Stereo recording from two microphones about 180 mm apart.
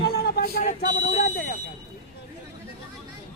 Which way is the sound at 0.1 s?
60° left (ahead or behind).